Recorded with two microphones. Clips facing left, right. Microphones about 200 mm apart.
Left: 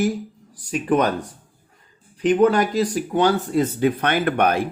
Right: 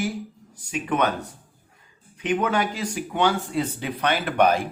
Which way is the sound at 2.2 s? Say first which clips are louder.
Left 7 dB; 35° left (ahead or behind).